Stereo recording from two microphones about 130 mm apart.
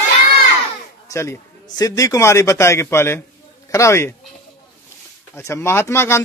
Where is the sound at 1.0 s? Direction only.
20° left (ahead or behind).